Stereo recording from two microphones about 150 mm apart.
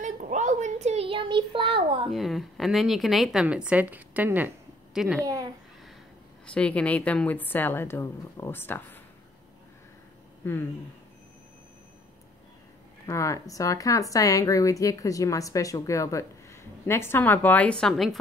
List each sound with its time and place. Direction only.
0.0 s child singing: 55° right (ahead or behind); by 2.0 s 35° right (ahead or behind)
2.0 s a woman's voice: centre (ahead or behind)
5.2 s a sound: 25° right (ahead or behind)
6.4 s a woman's voice: 10° left (ahead or behind)
10.4 s a woman's voice: 15° left (ahead or behind)
13.0 s speech: 20° left (ahead or behind); by 18.1 s centre (ahead or behind)